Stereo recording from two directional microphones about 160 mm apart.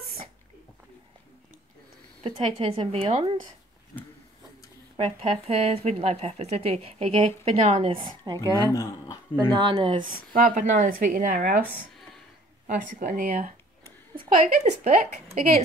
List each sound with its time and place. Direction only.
2.2 s speech: 35° right (ahead or behind)
3.9 s a sound: 20° left (ahead or behind)
4.9 s speech: 40° right (ahead or behind)
8.2 s speech: 25° right (ahead or behind)
8.7 s speech: 25° left (ahead or behind)
9.5 s speech: 30° right (ahead or behind)
10.0 s speech: 60° right (ahead or behind)
12.6 s speech: 60° right (ahead or behind)
14.1 s a woman's voice: 45° right (ahead or behind)